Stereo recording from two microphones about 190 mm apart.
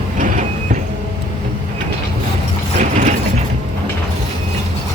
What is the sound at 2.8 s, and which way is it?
Mechanisms, 40° right (ahead or behind).